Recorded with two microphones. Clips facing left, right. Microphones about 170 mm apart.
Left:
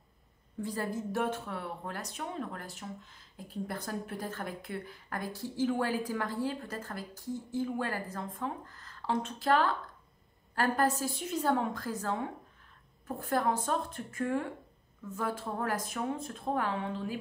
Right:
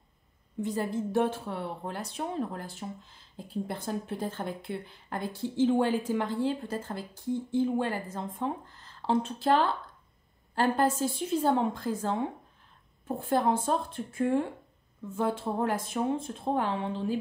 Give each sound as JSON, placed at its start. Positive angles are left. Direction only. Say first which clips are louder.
{"t": 0.6, "sound": "speech", "louder": "right 4 dB", "side_deg": -20}